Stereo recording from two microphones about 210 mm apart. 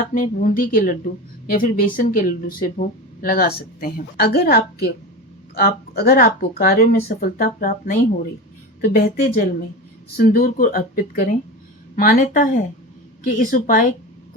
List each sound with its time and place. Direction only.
0.1 s speech: 40° left (ahead or behind)